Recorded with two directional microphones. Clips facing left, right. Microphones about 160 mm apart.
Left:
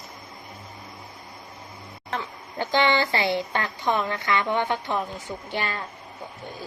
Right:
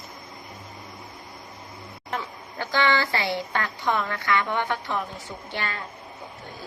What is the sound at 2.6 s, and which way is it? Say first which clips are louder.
A woman's voice: left 2 dB; 20° left (ahead or behind).